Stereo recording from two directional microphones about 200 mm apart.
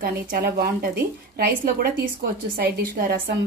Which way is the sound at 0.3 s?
50° right (ahead or behind).